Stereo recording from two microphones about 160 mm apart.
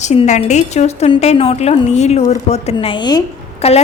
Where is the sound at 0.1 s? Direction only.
45° left (ahead or behind).